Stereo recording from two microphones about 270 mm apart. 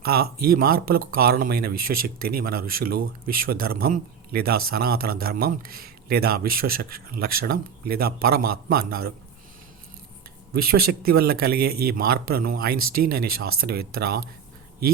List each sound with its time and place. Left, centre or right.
0.0 s speech: right
10.5 s speech: right